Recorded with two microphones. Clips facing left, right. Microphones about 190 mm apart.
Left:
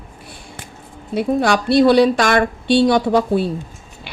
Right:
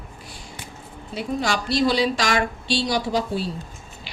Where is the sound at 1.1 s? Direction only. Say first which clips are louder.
Left 8 dB; 55° left (ahead or behind).